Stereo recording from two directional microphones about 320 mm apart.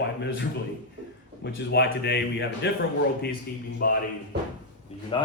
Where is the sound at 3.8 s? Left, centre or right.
Left.